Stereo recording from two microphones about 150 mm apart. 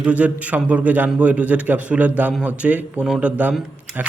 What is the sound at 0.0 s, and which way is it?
Speech, 10° right (ahead or behind).